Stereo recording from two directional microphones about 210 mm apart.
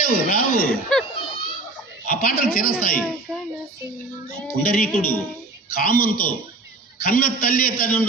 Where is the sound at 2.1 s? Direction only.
40° left (ahead or behind).